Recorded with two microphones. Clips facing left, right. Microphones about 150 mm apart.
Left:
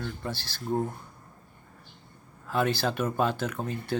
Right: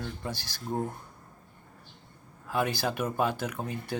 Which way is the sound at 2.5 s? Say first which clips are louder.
Left 2 dB; 10° right (ahead or behind).